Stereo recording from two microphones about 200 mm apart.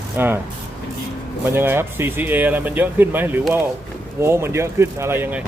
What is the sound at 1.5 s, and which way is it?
Speech, 10° right (ahead or behind).